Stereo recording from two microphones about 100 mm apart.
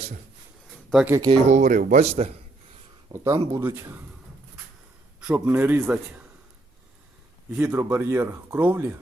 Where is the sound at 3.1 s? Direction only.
40° right (ahead or behind).